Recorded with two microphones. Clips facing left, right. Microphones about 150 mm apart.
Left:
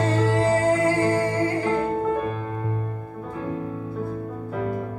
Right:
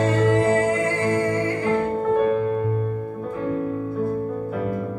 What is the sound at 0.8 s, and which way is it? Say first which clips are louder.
Music: left 1 dB; 35° left (ahead or behind).